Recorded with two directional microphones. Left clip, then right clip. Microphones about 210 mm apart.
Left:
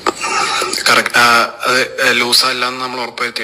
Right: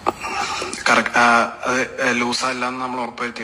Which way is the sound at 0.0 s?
Centre (ahead or behind).